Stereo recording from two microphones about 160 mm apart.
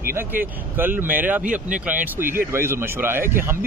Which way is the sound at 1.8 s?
10° right (ahead or behind).